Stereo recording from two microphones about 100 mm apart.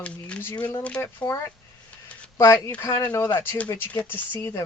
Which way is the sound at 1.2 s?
35° left (ahead or behind).